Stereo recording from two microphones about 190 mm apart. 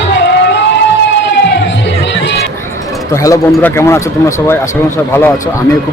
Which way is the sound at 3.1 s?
15° left (ahead or behind).